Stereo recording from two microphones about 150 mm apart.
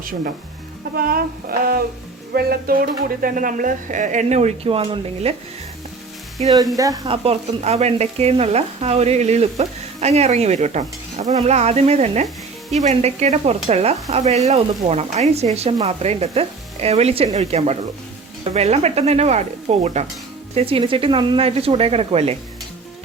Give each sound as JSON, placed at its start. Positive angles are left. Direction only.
{"t": 0.9, "sound": "child singing", "side_deg": -80}
{"t": 2.3, "sound": "speech", "side_deg": -90}
{"t": 6.7, "sound": "speech", "side_deg": -25}
{"t": 7.1, "sound": "speech", "side_deg": -45}
{"t": 20.6, "sound": "speech", "side_deg": -40}